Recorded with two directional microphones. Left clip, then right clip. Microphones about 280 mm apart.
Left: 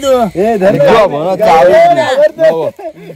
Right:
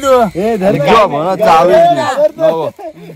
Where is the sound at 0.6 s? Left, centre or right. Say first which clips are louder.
Left 5 dB; right.